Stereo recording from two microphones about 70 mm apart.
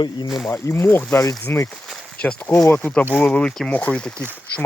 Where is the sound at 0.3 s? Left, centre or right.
Centre.